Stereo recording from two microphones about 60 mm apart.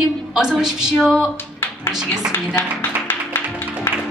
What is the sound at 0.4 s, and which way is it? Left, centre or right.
Speech, centre.